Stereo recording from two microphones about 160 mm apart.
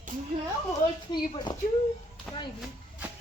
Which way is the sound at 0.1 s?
55° right (ahead or behind).